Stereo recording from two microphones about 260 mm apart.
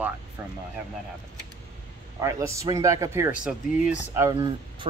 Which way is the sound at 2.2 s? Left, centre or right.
Centre.